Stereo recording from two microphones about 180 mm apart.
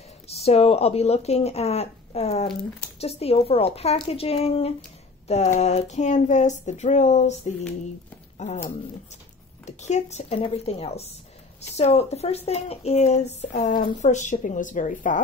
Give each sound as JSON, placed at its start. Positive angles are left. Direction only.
{"t": 0.3, "sound": "speech", "side_deg": 35}
{"t": 9.7, "sound": "speech", "side_deg": 40}